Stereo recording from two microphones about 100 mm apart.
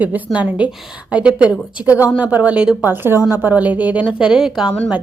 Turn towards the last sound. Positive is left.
turn(degrees=-10)  # may be behind; listen again after turning